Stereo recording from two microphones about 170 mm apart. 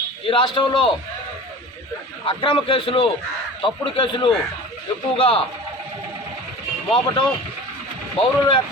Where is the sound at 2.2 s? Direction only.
30° left (ahead or behind).